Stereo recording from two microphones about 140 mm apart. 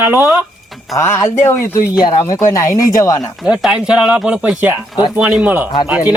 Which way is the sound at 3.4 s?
5° right (ahead or behind).